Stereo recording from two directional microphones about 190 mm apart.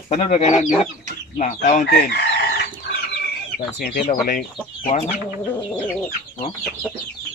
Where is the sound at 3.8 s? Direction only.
45° left (ahead or behind).